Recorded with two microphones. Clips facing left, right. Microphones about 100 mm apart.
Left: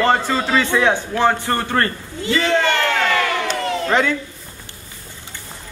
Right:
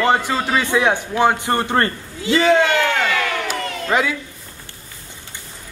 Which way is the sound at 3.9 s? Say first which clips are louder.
Even; 5° right (ahead or behind).